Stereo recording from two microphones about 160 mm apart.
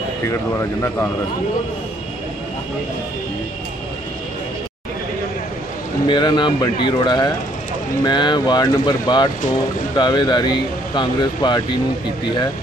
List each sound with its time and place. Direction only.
0.3 s speech: 20° left (ahead or behind)
6.0 s speech: 30° left (ahead or behind)